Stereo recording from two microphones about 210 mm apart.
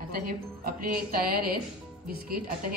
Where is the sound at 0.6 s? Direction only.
45° right (ahead or behind).